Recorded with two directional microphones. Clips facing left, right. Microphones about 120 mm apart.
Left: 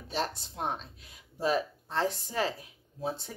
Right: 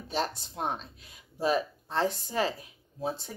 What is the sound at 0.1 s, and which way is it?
A woman's voice, 20° right (ahead or behind).